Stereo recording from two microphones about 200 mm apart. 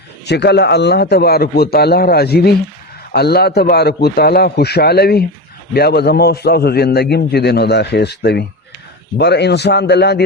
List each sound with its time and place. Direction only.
0.3 s a man's voice: 55° left (ahead or behind)